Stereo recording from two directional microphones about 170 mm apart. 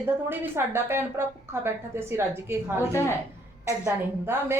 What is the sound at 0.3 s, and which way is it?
A woman's voice, 15° right (ahead or behind).